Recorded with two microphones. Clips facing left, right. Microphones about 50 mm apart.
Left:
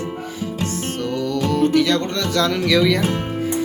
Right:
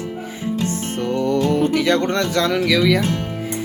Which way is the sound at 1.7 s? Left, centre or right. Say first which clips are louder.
Even; right.